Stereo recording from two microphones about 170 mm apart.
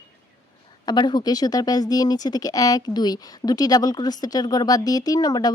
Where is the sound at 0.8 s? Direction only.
25° left (ahead or behind).